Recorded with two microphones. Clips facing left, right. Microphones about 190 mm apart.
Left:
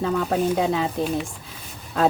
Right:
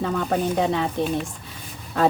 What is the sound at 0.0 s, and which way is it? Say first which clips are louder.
Speech: left 1 dB; centre (ahead or behind).